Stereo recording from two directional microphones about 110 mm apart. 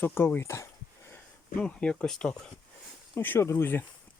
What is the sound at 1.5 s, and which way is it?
Speech, 10° left (ahead or behind).